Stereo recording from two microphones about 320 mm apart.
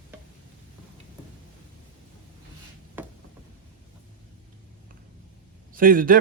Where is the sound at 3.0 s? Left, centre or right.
Centre.